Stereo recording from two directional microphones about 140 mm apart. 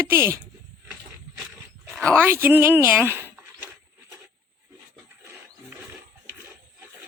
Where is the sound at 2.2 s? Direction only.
15° right (ahead or behind).